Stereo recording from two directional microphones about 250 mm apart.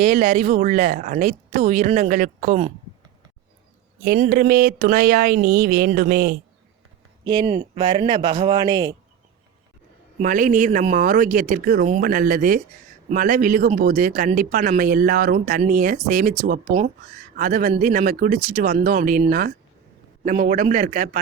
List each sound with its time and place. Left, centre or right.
0.0 s speech: right
4.0 s speech: right
7.3 s speech: centre
10.2 s speech: right